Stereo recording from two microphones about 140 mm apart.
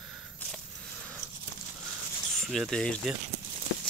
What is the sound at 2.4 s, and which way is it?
Speech, centre (ahead or behind).